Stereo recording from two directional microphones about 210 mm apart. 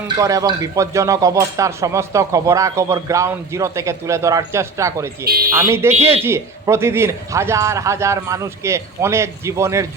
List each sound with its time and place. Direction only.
0.2 s speech: 15° right (ahead or behind)
5.2 s speech: 45° right (ahead or behind)
5.5 s speech: 10° right (ahead or behind)